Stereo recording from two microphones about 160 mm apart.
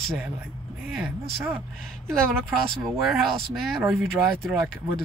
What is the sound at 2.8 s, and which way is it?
Speech, centre (ahead or behind).